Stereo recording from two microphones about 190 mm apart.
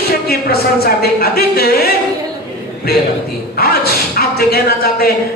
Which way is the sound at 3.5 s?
55° left (ahead or behind).